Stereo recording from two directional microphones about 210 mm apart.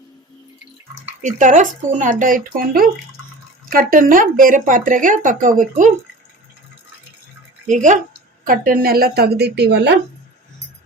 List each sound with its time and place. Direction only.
1.2 s speech: 35° right (ahead or behind)
7.7 s a woman's voice: 35° right (ahead or behind); by 10.0 s 55° right (ahead or behind)